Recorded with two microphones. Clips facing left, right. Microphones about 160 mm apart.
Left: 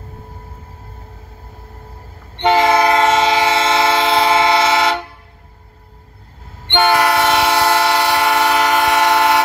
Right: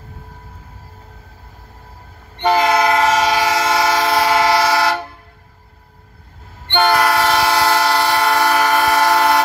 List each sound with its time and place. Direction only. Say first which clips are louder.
2.3 s train: left 2 dB; 25° left (ahead or behind)
6.7 s train: left 1 dB; 20° left (ahead or behind)